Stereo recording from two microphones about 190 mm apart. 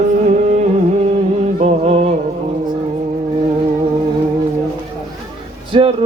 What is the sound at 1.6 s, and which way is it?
Music, 35° right (ahead or behind).